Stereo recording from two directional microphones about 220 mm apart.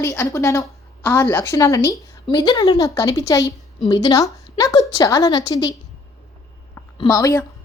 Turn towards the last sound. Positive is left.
turn(degrees=15)  # may be behind; listen again after turning